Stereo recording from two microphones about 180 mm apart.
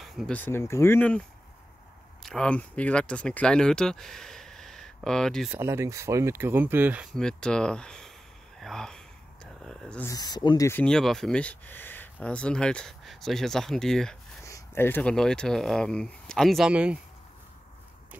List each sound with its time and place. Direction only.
0.0 s a sound: centre (ahead or behind)
0.4 s speech: 15° left (ahead or behind)
2.2 s speech: 5° left (ahead or behind)
5.5 s speech: 15° right (ahead or behind)
7.2 s speech: 5° left (ahead or behind)
8.5 s a sound: centre (ahead or behind)
10.0 s speech: 20° left (ahead or behind)
10.7 s speech: 5° left (ahead or behind)
14.4 s speech: 15° left (ahead or behind); by 17.0 s 5° right (ahead or behind)